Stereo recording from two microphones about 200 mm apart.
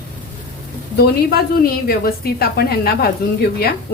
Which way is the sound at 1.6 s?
50° left (ahead or behind).